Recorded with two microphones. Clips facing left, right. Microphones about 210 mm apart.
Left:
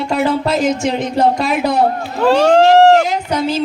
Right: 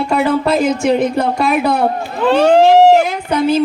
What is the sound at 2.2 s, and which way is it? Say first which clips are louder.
Speech: right 1 dB; 5° right (ahead or behind).